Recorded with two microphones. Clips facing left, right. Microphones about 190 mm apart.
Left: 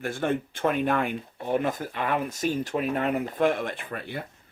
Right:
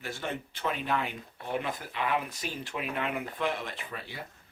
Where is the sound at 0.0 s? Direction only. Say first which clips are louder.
Left 9 dB; 50° left (ahead or behind).